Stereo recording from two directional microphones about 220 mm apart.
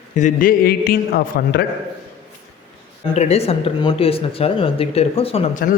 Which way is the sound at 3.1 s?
30° left (ahead or behind).